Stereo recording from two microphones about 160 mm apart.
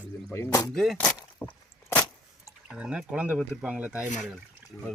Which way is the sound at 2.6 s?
5° right (ahead or behind).